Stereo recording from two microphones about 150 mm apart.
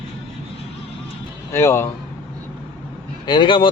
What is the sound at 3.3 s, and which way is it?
Speech, 30° left (ahead or behind).